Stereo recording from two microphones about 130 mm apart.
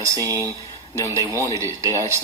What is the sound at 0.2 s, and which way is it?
Speech, 25° right (ahead or behind).